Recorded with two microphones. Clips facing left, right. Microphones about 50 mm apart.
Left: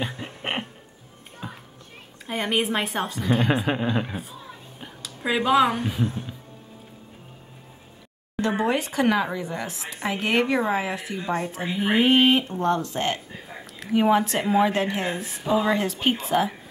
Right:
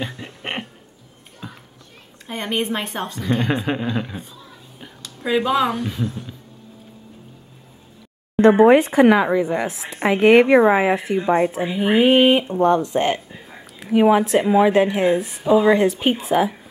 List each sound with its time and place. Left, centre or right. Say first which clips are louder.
0.2 s a sound: right 1 dB; centre
1.4 s music: even; centre
2.2 s a woman's voice: right 1 dB; centre
6.0 s speech: right 1 dB; left
8.4 s speech: right 12 dB; right; by 10.5 s centre
10.5 s speech: right 10 dB; right
11.5 s a woman's voice: right 5 dB; centre